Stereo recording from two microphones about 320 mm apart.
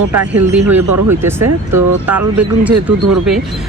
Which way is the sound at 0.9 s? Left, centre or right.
Right.